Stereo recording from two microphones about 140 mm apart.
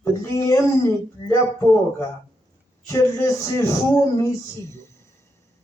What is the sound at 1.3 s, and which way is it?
Speech, 20° left (ahead or behind).